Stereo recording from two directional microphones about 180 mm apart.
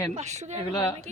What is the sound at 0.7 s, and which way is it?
Speech, 20° left (ahead or behind).